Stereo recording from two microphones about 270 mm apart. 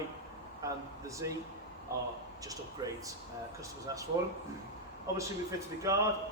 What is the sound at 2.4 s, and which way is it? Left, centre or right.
Speech, centre.